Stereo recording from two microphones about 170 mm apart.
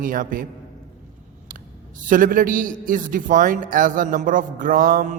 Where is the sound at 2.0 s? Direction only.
55° right (ahead or behind).